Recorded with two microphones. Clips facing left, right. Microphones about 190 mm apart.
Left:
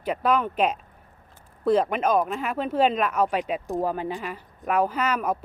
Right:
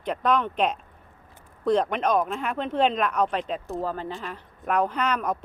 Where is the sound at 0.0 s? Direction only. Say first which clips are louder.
Left 1 dB; 5° left (ahead or behind).